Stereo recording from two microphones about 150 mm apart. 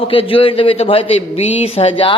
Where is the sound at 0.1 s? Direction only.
35° left (ahead or behind).